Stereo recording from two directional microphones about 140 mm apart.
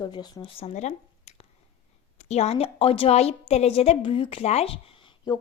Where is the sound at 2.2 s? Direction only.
50° left (ahead or behind).